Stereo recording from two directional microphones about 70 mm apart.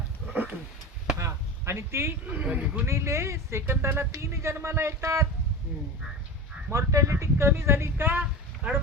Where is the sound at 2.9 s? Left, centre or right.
Right.